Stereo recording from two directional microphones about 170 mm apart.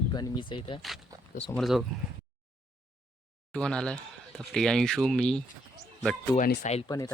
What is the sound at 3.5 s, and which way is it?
Speech, 5° left (ahead or behind).